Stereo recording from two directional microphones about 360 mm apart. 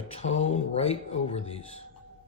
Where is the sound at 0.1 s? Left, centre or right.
Centre.